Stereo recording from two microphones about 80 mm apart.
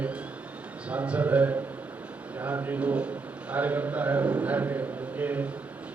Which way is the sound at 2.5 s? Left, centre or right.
Right.